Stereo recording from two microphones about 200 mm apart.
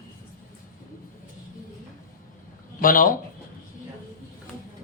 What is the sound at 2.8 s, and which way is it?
Speech, 45° left (ahead or behind).